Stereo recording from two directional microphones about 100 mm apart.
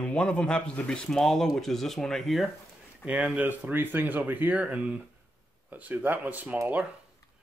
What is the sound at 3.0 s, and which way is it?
Speech, 15° right (ahead or behind).